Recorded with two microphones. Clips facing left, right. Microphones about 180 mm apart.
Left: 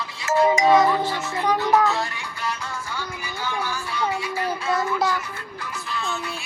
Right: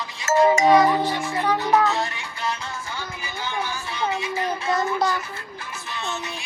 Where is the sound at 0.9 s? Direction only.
15° right (ahead or behind).